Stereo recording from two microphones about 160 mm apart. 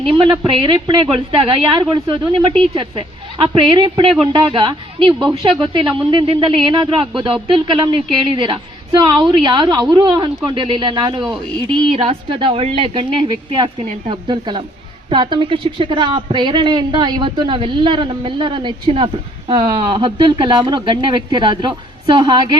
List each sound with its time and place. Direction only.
0.0 s a woman's voice: 30° right (ahead or behind)